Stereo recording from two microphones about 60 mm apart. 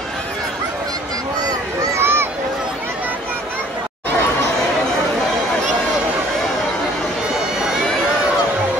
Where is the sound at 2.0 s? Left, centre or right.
Right.